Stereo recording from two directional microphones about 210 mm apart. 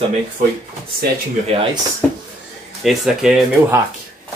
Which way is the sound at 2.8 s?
Centre (ahead or behind).